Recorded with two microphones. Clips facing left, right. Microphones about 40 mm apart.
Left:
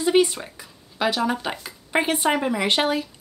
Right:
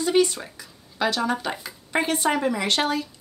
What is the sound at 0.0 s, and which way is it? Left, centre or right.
Speech, centre.